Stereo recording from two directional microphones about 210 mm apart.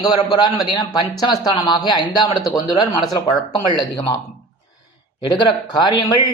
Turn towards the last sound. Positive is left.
turn(degrees=20)  # may be behind; listen again after turning